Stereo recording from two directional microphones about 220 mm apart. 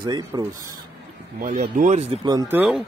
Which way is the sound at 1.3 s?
40° right (ahead or behind).